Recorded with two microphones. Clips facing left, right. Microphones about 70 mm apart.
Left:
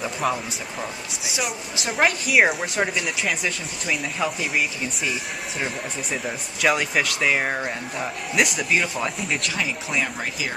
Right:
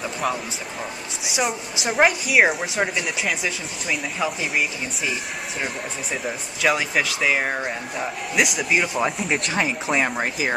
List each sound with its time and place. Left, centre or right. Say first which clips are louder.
1.3 s speech: right 4 dB; right
2.0 s speech: right 1 dB; centre
6.2 s speech: even; centre
9.6 s speech: right 4 dB; right